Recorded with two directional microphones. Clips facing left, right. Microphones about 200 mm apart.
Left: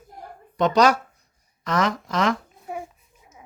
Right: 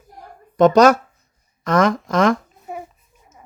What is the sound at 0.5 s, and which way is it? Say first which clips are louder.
Speech: right 7 dB; 50° right (ahead or behind).